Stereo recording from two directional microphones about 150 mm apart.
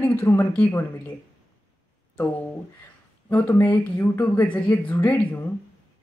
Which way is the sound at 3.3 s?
15° left (ahead or behind).